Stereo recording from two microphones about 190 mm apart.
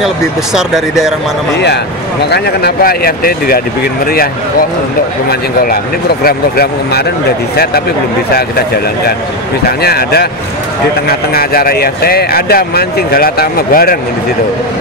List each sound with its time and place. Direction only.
0.6 s speech: centre (ahead or behind)
2.3 s speech: 55° left (ahead or behind)
6.2 s speech: 55° left (ahead or behind)
8.4 s speech: 55° left (ahead or behind)